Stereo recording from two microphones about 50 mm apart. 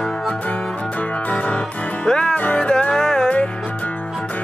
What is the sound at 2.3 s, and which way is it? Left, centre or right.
Music, left.